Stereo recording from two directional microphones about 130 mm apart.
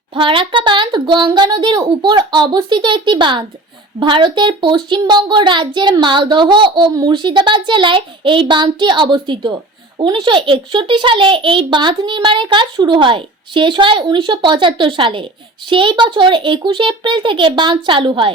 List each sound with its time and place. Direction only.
0.1 s a child's voice: 40° right (ahead or behind)